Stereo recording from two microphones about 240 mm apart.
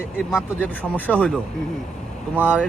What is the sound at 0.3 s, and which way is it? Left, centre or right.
Speech, centre.